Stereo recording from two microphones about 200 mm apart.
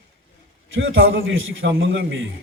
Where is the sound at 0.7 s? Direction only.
75° right (ahead or behind).